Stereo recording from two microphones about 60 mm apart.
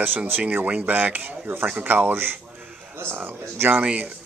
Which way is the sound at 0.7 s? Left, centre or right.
Right.